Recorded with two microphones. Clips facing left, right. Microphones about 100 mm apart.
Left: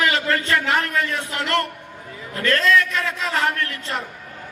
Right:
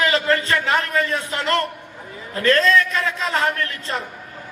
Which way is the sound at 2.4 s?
35° right (ahead or behind).